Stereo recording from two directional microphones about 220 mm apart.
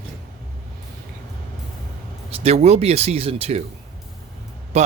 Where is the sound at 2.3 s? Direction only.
30° right (ahead or behind).